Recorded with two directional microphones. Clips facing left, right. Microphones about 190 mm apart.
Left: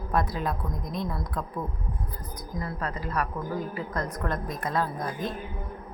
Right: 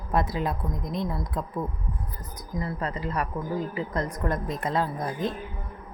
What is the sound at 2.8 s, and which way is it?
A woman's voice, 20° right (ahead or behind).